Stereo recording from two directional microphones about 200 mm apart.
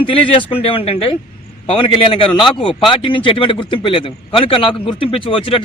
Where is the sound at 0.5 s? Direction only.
25° left (ahead or behind).